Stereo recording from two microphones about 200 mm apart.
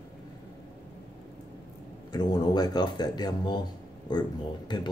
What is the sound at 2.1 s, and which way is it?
Speech, 20° left (ahead or behind).